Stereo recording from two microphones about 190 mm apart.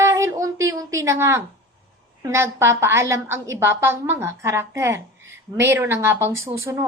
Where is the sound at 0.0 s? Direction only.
15° right (ahead or behind).